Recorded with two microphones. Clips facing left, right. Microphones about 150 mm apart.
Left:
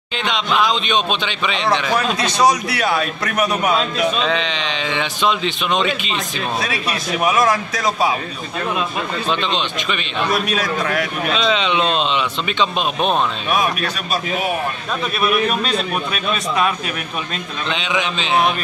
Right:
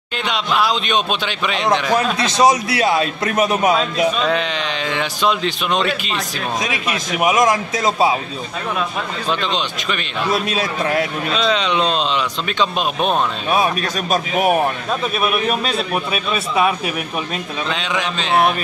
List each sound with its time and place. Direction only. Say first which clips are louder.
0.2 s a man's voice: even; 5° right (ahead or behind)
2.0 s a man's voice: right 1 dB; 25° right (ahead or behind)
4.2 s speech: right 1 dB; 5° right (ahead or behind)
6.6 s a man's voice: even; 20° right (ahead or behind)
9.3 s speech: right 1 dB; centre (ahead or behind)
10.3 s a man's voice: even; 25° right (ahead or behind)
11.3 s speech: right 1 dB; centre (ahead or behind)
13.5 s speech: right 4 dB; 30° right (ahead or behind)
15.1 s a man's voice: left 3 dB; 5° right (ahead or behind)
17.6 s speech: left 2 dB; centre (ahead or behind)